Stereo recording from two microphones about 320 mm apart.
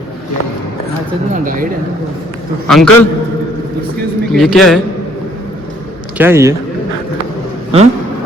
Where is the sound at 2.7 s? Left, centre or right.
Centre.